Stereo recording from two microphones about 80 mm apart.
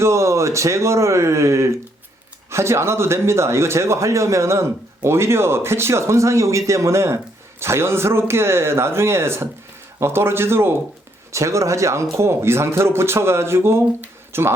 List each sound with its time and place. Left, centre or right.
0.0 s speech: right